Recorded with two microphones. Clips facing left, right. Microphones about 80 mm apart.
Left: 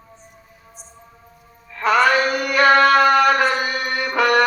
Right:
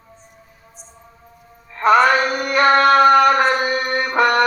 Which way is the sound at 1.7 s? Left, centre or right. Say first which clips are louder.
Right 3 dB; right.